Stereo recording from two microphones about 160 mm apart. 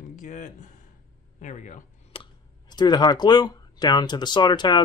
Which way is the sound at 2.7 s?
25° left (ahead or behind).